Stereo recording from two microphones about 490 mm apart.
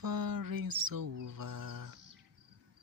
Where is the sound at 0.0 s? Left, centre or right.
Right.